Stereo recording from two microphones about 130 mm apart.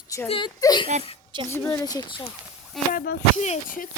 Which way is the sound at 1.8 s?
30° left (ahead or behind).